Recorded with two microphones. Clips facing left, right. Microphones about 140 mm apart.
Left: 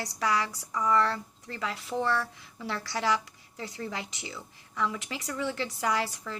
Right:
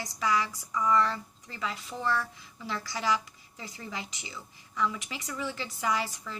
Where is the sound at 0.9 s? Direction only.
75° left (ahead or behind).